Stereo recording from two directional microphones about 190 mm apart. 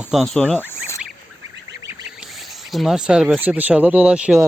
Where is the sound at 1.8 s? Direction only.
20° right (ahead or behind).